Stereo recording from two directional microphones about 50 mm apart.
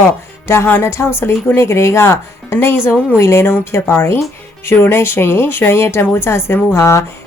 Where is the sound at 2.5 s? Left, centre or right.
Left.